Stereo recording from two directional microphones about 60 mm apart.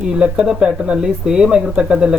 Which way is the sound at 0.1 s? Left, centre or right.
Centre.